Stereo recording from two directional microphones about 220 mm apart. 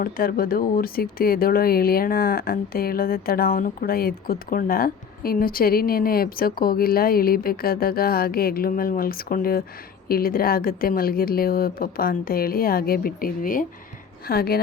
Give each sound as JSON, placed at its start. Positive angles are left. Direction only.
{"t": 0.0, "sound": "speech", "side_deg": 40}